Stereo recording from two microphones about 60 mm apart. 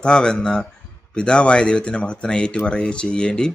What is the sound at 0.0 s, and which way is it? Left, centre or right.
Speech, centre.